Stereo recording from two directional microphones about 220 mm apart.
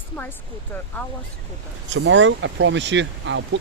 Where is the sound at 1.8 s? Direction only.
55° right (ahead or behind).